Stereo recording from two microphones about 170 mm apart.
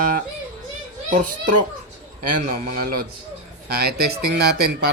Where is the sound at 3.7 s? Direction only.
70° right (ahead or behind).